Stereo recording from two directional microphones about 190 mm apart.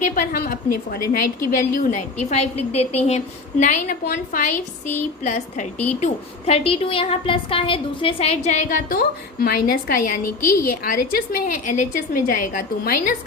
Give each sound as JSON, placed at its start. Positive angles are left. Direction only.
{"t": 0.3, "sound": "a woman's voice", "side_deg": 55}